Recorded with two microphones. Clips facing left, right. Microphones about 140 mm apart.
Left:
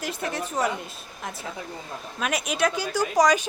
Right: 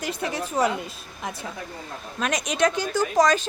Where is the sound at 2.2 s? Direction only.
5° left (ahead or behind).